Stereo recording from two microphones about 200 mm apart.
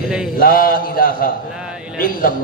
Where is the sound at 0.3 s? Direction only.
45° left (ahead or behind).